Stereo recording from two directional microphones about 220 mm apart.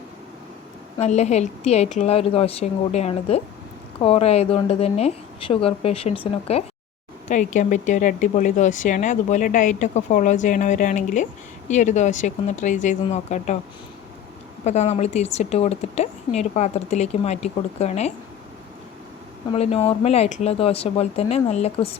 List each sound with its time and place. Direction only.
0.9 s speech: 30° left (ahead or behind)
14.6 s speech: 30° left (ahead or behind)
19.5 s speech: 25° left (ahead or behind)